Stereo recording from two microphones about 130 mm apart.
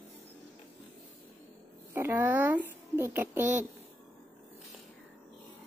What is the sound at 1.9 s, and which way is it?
A child's voice, 15° right (ahead or behind).